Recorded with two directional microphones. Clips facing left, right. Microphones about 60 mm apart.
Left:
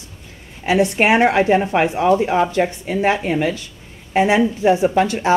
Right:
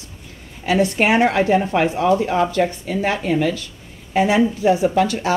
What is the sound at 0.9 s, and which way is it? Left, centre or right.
A woman's voice, centre.